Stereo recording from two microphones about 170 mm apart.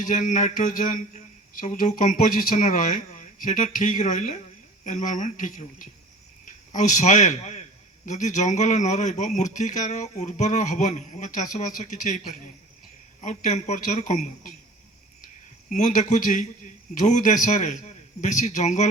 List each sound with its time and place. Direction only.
0.0 s a man's voice: 45° left (ahead or behind)
15.7 s a man's voice: 50° left (ahead or behind)